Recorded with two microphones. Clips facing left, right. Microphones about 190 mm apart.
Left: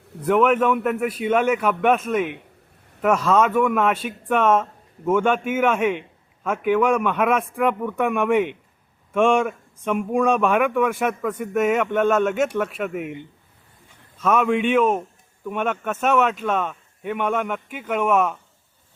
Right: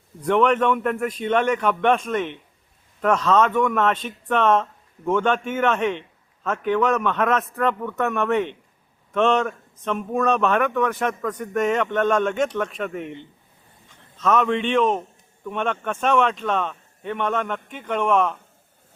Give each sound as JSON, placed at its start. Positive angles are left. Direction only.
{"t": 0.3, "sound": "speech", "side_deg": 5}